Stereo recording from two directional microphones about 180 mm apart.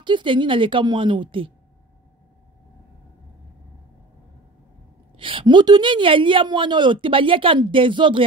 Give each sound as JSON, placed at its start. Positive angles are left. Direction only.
{"t": 0.0, "sound": "a woman's voice", "side_deg": -25}
{"t": 5.1, "sound": "a woman's voice", "side_deg": -30}